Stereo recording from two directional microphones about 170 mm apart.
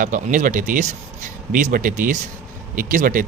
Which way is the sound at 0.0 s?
50° right (ahead or behind).